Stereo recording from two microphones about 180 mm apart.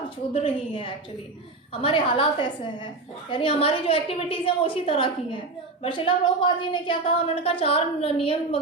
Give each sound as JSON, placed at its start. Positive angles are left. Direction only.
{"t": 0.3, "sound": "a woman's voice", "side_deg": 30}